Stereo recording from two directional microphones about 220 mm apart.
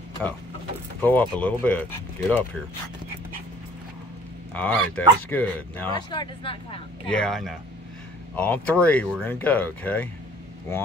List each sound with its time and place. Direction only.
1.0 s speech: 10° left (ahead or behind)
4.6 s speech: 5° left (ahead or behind)
5.9 s speech: 20° left (ahead or behind)
7.2 s speech: centre (ahead or behind)